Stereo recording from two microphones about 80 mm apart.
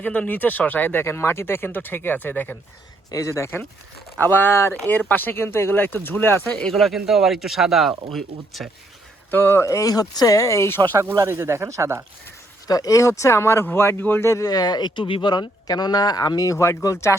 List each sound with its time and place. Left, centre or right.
0.0 s speech: centre
3.1 s speech: left
4.2 s speech: left
6.6 s speech: centre
9.3 s speech: left
9.9 s speech: left
11.3 s speech: right
12.6 s speech: left
14.3 s speech: left